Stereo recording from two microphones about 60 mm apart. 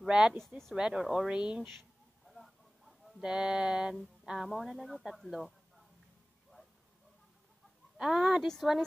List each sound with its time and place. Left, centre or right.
0.1 s speech: centre
2.2 s a sound: centre
3.3 s speech: centre
4.3 s speech: centre
8.0 s speech: centre